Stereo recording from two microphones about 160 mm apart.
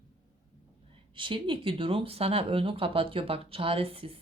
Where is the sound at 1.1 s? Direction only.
30° right (ahead or behind).